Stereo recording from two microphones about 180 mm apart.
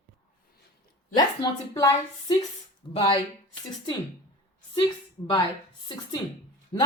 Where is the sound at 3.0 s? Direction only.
25° left (ahead or behind).